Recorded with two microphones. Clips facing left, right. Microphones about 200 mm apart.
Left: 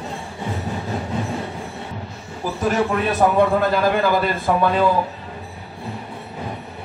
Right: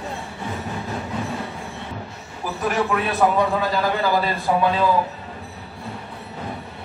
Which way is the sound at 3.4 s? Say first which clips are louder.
Left 4 dB; 55° left (ahead or behind).